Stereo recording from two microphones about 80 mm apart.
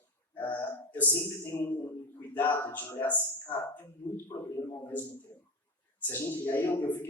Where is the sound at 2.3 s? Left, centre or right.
Left.